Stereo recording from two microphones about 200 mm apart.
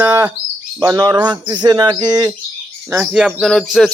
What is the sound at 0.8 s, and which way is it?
Speech, 15° right (ahead or behind).